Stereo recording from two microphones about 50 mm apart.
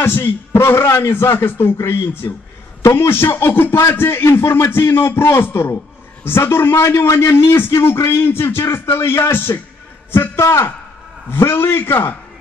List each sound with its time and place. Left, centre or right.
0.0 s a man's voice: left